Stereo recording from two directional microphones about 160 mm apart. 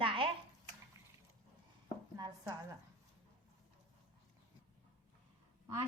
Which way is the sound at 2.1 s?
25° right (ahead or behind).